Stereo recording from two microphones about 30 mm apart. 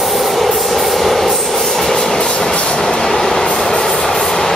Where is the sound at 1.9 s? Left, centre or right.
Centre.